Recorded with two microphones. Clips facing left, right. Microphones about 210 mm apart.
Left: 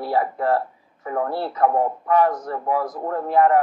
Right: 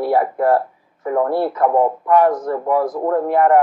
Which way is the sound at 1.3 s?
55° right (ahead or behind).